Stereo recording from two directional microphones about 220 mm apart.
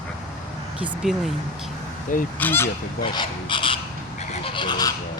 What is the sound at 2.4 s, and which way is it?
Goose, 10° left (ahead or behind).